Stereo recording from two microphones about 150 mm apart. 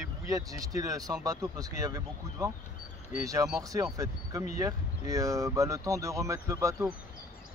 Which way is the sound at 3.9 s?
20° right (ahead or behind).